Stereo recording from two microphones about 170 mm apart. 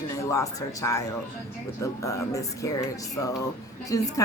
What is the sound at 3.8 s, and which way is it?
Speech, 20° left (ahead or behind).